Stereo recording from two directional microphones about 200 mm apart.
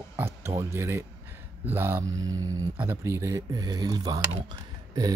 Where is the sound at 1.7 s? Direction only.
10° right (ahead or behind).